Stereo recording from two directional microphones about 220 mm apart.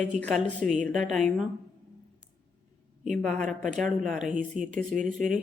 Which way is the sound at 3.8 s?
Centre (ahead or behind).